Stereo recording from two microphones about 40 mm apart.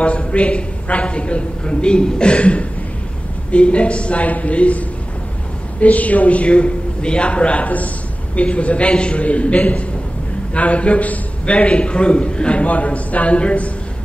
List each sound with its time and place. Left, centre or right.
0.3 s a woman's voice: left
7.6 s a man's voice: left